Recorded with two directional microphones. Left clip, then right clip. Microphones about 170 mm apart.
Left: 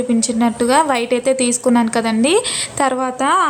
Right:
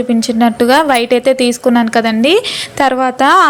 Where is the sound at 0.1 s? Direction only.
20° right (ahead or behind).